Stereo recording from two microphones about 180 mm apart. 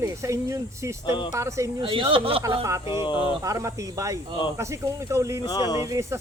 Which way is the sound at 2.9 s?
25° left (ahead or behind).